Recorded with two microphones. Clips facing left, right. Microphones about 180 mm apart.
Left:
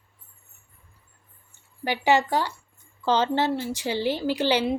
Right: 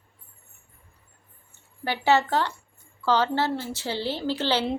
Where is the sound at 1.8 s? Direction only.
15° left (ahead or behind).